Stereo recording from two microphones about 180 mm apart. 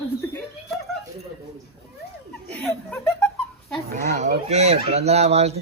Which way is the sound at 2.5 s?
5° left (ahead or behind).